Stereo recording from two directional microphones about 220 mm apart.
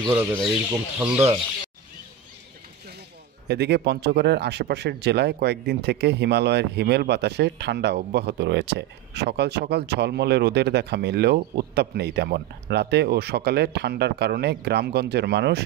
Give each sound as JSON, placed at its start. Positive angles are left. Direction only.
{"t": 0.0, "sound": "speech", "side_deg": -10}
{"t": 3.4, "sound": "speech", "side_deg": -50}